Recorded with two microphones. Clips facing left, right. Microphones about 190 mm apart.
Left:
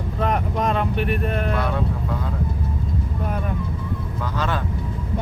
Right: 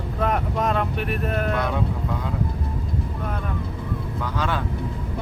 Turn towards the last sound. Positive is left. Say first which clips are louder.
# left 1 dB
turn(degrees=-10)  # may be behind; listen again after turning